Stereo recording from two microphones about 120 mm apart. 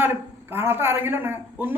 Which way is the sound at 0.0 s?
20° right (ahead or behind).